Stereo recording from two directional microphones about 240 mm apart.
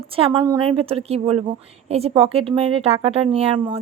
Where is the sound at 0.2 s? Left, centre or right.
Centre.